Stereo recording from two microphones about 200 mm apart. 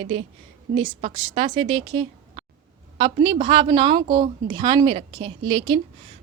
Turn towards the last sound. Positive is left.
turn(degrees=-25)  # may be behind; listen again after turning